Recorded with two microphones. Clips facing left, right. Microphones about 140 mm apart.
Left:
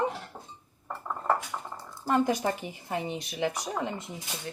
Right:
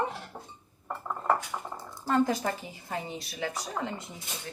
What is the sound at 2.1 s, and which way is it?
A woman's voice, 15° left (ahead or behind).